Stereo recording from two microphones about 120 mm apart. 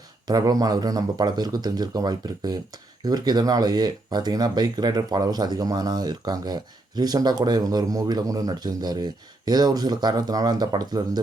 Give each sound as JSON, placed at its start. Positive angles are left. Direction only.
{"t": 0.3, "sound": "speech", "side_deg": -35}